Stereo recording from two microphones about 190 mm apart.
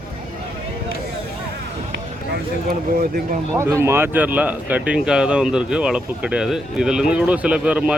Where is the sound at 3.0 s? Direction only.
45° right (ahead or behind).